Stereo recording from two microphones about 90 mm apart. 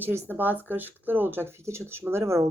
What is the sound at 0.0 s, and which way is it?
Speech, 20° right (ahead or behind).